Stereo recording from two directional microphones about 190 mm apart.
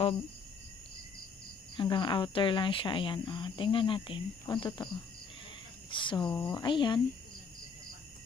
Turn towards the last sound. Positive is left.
turn(degrees=25)  # may be behind; listen again after turning